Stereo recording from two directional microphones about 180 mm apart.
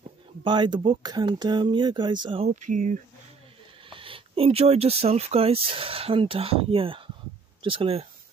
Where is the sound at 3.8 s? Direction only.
30° right (ahead or behind).